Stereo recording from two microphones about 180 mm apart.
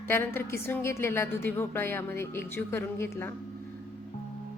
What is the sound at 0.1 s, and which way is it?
A woman's voice, 15° left (ahead or behind).